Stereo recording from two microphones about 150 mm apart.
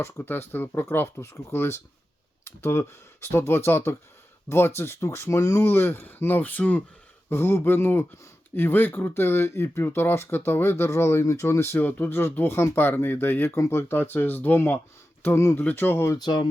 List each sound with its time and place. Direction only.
0.0 s speech: 15° left (ahead or behind)
16.1 s speech: 30° left (ahead or behind)